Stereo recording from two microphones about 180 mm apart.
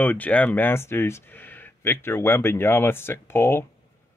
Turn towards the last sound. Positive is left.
turn(degrees=15)  # may be behind; listen again after turning